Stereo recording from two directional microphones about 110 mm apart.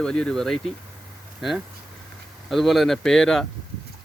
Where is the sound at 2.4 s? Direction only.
Centre (ahead or behind).